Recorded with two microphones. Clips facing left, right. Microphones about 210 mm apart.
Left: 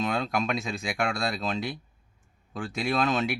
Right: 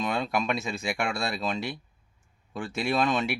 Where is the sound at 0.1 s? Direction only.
Centre (ahead or behind).